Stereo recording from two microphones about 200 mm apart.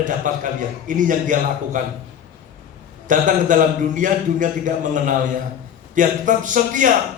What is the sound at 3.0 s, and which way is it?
A man's voice, 40° right (ahead or behind).